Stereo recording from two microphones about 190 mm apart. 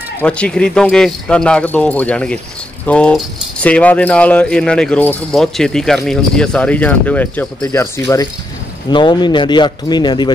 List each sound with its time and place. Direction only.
0.2 s a man's voice: 5° left (ahead or behind); by 10.3 s 25° left (ahead or behind)